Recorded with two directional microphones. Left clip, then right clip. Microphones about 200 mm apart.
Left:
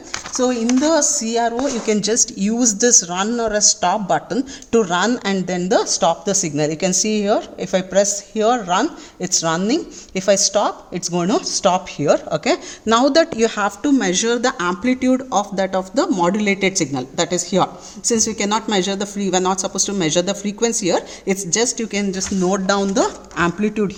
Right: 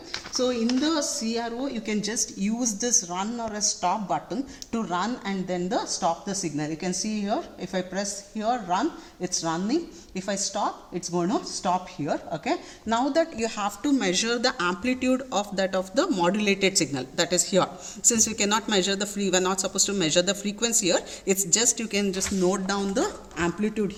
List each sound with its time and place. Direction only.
0.3 s speech: 60° left (ahead or behind)